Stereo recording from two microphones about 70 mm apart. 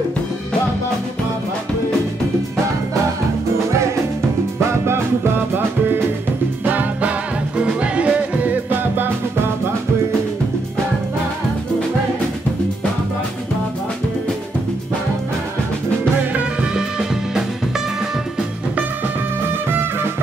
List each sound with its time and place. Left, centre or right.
6.6 s music: right
16.3 s music: centre